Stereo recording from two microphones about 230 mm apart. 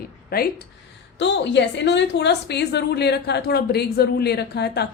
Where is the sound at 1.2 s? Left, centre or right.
Left.